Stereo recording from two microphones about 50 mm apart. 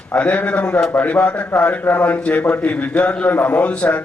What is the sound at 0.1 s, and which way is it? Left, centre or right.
A man's voice, left.